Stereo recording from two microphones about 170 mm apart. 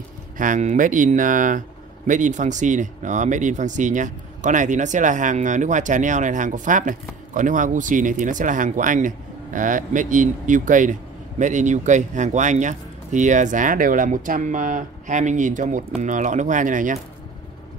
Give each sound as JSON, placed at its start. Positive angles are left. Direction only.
{"t": 0.4, "sound": "speech", "side_deg": -45}